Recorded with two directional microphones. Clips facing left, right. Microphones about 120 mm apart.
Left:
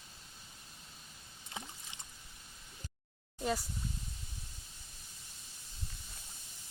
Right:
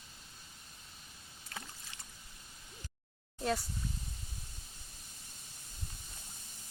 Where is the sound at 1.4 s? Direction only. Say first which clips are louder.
Left 1 dB; 20° left (ahead or behind).